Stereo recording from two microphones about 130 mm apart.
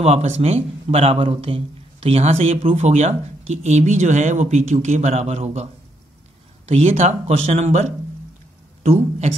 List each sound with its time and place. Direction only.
0.0 s a man's voice: 55° right (ahead or behind)